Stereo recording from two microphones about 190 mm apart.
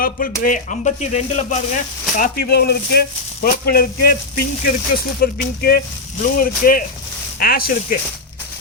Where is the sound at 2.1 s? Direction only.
50° left (ahead or behind).